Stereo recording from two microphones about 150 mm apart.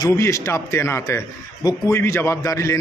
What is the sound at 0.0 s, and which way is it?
Speech, 20° left (ahead or behind).